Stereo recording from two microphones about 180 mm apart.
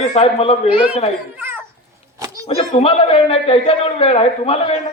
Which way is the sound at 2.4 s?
35° left (ahead or behind).